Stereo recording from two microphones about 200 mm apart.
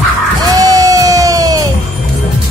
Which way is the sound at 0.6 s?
15° right (ahead or behind).